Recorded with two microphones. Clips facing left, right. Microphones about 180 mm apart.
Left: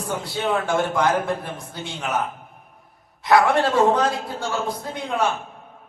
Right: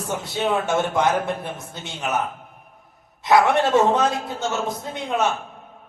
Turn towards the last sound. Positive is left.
turn(degrees=-20)  # may be behind; listen again after turning